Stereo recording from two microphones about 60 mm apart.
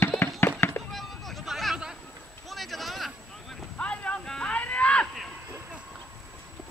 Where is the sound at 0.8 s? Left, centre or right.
Centre.